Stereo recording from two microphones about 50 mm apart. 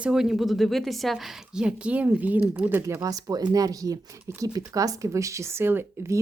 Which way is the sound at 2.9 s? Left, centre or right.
Right.